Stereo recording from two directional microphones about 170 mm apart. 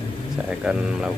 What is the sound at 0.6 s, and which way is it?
Speech, 5° right (ahead or behind).